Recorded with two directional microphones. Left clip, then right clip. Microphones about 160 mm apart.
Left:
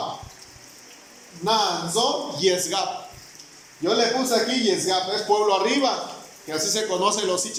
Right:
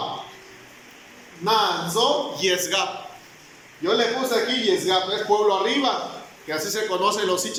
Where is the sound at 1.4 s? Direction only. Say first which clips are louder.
Right 1 dB; 25° left (ahead or behind).